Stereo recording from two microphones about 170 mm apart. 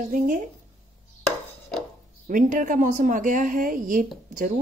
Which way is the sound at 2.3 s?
50° right (ahead or behind).